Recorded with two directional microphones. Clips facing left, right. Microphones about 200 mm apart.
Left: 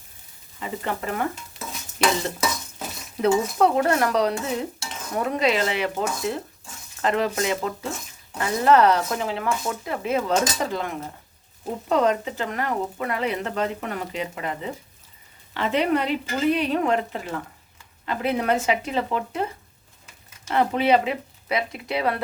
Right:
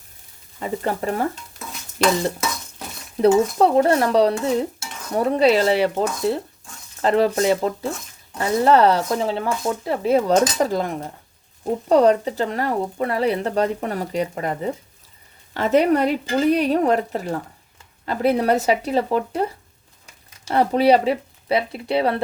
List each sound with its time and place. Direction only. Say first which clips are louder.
0.6 s speech: right 5 dB; 35° right (ahead or behind)
3.2 s speech: right 4 dB; 35° right (ahead or behind)